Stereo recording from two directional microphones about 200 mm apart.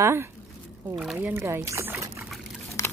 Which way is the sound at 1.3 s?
10° right (ahead or behind).